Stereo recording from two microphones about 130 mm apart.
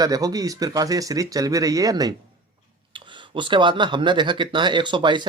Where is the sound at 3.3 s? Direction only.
40° right (ahead or behind).